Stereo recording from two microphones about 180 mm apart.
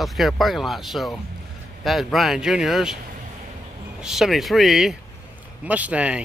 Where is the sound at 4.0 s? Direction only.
Centre (ahead or behind).